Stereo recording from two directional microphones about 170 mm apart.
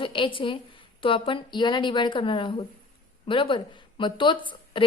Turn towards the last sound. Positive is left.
turn(degrees=30)  # may be behind; listen again after turning